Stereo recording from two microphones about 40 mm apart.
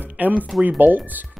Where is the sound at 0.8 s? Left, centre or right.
Right.